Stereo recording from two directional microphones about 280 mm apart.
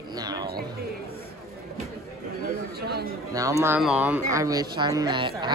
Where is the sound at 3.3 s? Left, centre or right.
Centre.